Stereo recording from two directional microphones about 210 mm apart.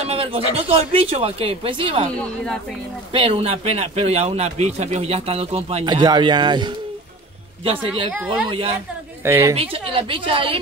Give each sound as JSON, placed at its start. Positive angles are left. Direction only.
{"t": 0.0, "sound": "a man's voice", "side_deg": -30}
{"t": 2.1, "sound": "a woman's voice", "side_deg": 5}
{"t": 3.1, "sound": "a man's voice", "side_deg": -25}
{"t": 9.2, "sound": "a woman's voice", "side_deg": -10}
{"t": 9.6, "sound": "a man's voice", "side_deg": -25}